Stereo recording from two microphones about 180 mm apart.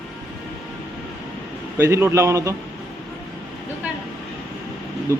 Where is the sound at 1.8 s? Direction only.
15° right (ahead or behind).